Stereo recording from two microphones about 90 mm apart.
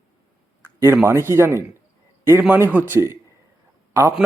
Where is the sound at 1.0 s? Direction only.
30° right (ahead or behind).